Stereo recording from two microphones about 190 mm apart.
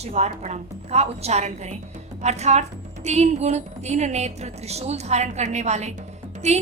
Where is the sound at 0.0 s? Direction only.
35° right (ahead or behind).